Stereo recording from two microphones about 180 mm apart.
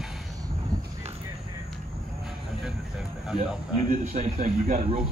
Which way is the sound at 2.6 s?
5° right (ahead or behind).